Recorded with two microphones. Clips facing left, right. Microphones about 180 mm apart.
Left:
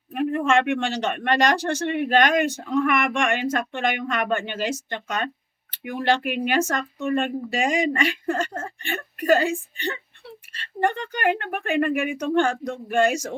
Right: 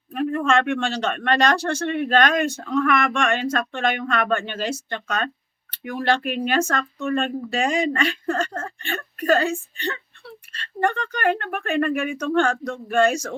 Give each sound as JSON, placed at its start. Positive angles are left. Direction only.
{"t": 0.1, "sound": "speech", "side_deg": 15}